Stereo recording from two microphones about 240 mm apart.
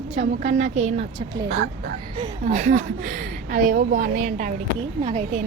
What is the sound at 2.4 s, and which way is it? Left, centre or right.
A woman's voice, right.